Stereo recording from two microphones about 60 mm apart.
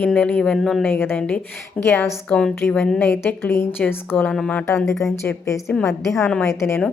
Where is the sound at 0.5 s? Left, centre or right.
Centre.